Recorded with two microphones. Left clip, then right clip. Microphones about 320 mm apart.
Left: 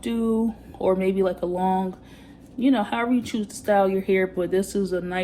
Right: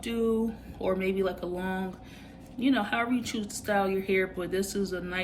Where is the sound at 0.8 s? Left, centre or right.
Centre.